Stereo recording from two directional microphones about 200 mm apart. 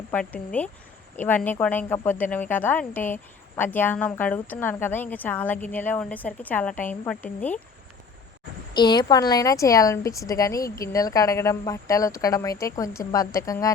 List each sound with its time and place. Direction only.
0.1 s speech: 5° left (ahead or behind)
8.7 s speech: 20° left (ahead or behind)